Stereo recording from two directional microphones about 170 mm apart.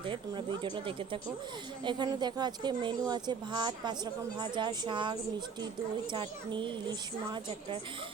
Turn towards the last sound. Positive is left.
turn(degrees=-25)  # may be behind; listen again after turning